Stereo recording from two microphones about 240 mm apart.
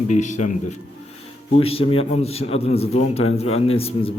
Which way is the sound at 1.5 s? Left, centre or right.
Left.